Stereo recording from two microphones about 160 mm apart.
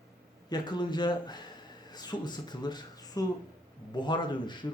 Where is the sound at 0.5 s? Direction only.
25° left (ahead or behind).